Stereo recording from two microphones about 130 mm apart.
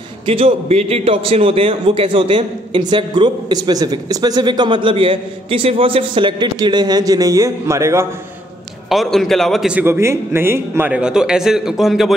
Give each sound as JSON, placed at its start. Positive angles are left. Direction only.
{"t": 0.3, "sound": "a man's voice", "side_deg": -50}
{"t": 8.8, "sound": "a man's voice", "side_deg": 0}
{"t": 9.7, "sound": "a man's voice", "side_deg": -15}
{"t": 10.9, "sound": "a man's voice", "side_deg": -5}